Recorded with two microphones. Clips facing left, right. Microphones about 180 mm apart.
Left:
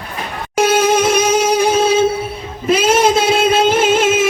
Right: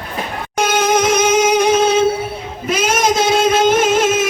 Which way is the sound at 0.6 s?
30° left (ahead or behind).